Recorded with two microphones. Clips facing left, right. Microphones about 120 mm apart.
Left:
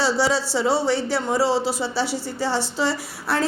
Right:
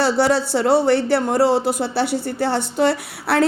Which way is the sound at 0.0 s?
55° right (ahead or behind).